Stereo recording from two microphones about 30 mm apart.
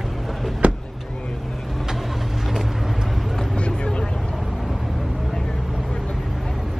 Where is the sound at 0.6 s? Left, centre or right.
Right.